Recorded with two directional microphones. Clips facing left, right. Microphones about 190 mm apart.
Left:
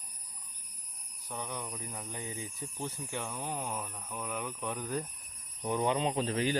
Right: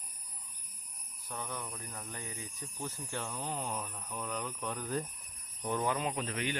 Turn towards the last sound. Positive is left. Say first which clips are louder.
# left 5 dB
turn(degrees=35)  # may be behind; listen again after turning